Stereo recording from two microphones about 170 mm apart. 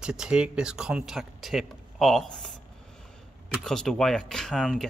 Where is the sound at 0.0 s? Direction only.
5° right (ahead or behind).